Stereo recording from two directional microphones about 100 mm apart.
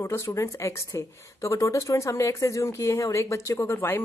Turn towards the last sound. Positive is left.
turn(degrees=25)  # may be behind; listen again after turning